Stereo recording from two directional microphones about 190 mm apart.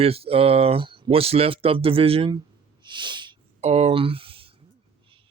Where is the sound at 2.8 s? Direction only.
25° right (ahead or behind).